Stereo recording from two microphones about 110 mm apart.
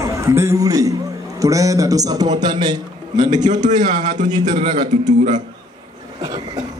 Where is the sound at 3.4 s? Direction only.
90° right.